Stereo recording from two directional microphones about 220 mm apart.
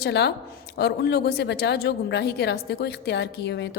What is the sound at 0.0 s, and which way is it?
A woman's voice, 50° left (ahead or behind).